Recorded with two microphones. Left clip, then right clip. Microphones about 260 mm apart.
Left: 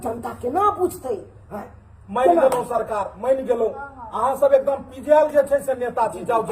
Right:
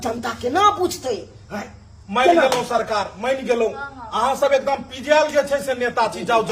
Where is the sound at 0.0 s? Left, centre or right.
Right.